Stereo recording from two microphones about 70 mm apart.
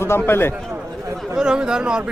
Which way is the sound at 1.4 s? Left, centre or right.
Centre.